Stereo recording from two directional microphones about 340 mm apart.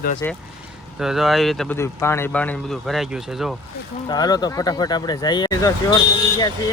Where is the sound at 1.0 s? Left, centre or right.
Centre.